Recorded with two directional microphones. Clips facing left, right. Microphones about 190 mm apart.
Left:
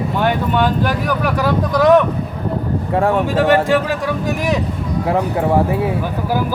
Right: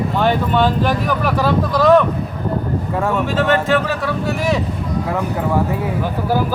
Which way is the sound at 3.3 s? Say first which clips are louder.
Left 2 dB; 10° left (ahead or behind).